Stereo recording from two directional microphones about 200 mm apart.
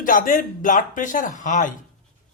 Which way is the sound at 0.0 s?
45° left (ahead or behind).